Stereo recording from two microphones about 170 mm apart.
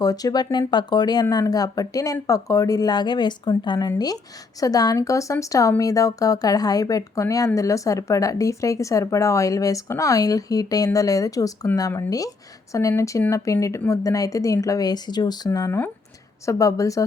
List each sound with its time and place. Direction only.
0.0 s speech: 20° left (ahead or behind)